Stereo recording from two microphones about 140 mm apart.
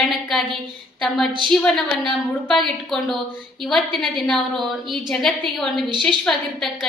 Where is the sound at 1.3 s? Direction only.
35° right (ahead or behind).